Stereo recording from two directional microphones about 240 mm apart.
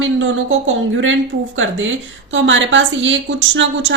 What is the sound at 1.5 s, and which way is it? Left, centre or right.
A woman's voice, right.